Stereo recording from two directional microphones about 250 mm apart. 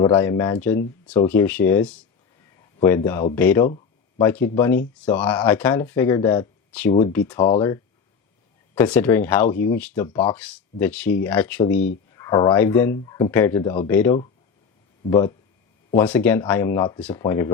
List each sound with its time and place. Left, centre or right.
0.0 s speech: centre
8.7 s speech: centre